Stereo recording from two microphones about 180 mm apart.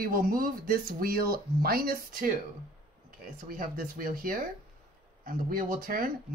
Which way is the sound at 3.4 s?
50° right (ahead or behind).